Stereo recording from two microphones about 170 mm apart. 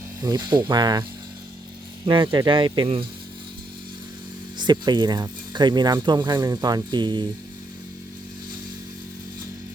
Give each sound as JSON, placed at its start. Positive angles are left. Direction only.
{"t": 0.2, "sound": "speech", "side_deg": -25}
{"t": 2.2, "sound": "speech", "side_deg": -25}
{"t": 4.5, "sound": "speech", "side_deg": -25}